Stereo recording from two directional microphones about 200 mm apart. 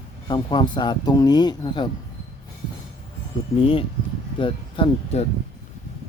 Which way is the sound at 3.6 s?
30° left (ahead or behind).